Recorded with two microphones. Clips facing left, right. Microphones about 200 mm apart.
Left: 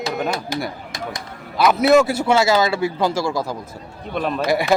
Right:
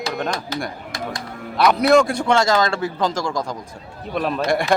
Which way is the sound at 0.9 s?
20° left (ahead or behind).